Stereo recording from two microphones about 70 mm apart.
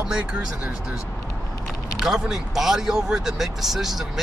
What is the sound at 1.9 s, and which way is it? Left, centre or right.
Speech, centre.